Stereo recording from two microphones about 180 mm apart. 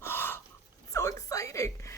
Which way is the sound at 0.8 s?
20° left (ahead or behind).